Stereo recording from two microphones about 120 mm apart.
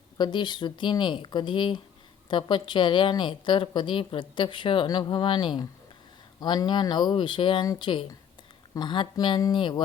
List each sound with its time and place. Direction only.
0.2 s a woman's voice: 40° left (ahead or behind)